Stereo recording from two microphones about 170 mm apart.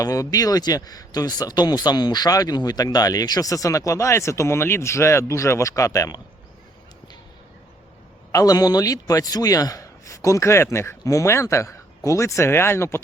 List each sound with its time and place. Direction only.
0.0 s speech: 20° left (ahead or behind)
8.3 s speech: 20° left (ahead or behind)